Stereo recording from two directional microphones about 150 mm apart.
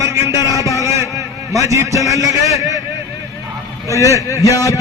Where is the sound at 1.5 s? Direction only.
20° right (ahead or behind).